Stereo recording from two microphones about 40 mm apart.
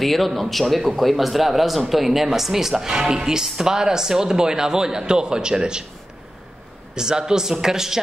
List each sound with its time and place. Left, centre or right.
0.0 s a man's voice: centre
7.0 s speech: centre